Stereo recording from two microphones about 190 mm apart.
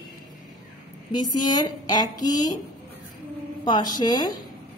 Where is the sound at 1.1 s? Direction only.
20° left (ahead or behind).